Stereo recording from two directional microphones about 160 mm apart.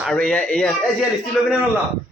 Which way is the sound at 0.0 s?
5° left (ahead or behind).